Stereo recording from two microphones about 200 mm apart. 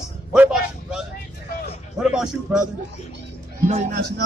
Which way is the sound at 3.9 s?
55° right (ahead or behind).